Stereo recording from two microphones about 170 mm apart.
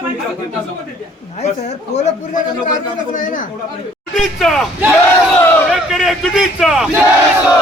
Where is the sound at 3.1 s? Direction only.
50° left (ahead or behind).